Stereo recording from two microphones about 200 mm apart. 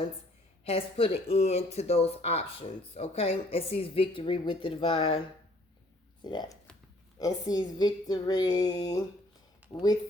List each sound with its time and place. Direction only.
0.6 s speech: 30° left (ahead or behind)
6.2 s speech: 20° left (ahead or behind)
9.6 s a sound: 10° right (ahead or behind)